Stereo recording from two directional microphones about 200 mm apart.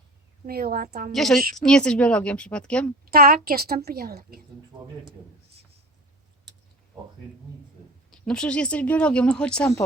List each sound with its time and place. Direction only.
0.4 s a woman's voice: 50° right (ahead or behind)
1.1 s speech: centre (ahead or behind)
3.1 s a woman's voice: 50° right (ahead or behind)
8.1 s speech: 5° left (ahead or behind)